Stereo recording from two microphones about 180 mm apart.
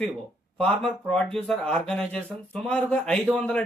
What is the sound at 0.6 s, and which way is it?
Speech, 5° left (ahead or behind).